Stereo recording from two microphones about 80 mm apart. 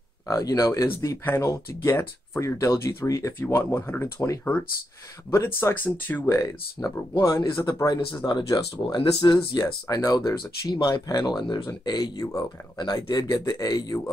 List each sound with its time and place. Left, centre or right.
0.3 s speech: left
0.8 s speech: left
3.3 s speech: left
5.3 s speech: left
5.9 s speech: left
6.2 s speech: left
12.7 s speech: left
13.3 s speech: left